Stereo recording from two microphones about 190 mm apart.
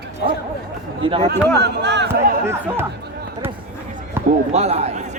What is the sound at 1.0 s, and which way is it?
Speech, 30° right (ahead or behind).